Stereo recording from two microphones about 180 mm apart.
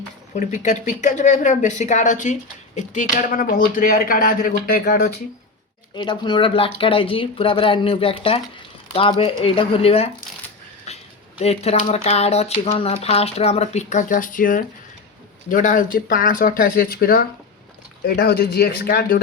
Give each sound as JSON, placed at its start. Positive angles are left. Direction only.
{"t": 0.3, "sound": "speech", "side_deg": 45}
{"t": 5.9, "sound": "speech", "side_deg": 25}